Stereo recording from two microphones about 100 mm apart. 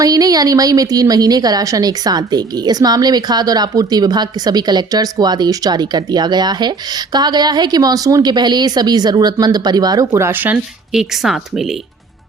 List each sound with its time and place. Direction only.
0.0 s a woman's voice: 40° right (ahead or behind); by 10.6 s 20° right (ahead or behind)
10.9 s speech: 5° right (ahead or behind)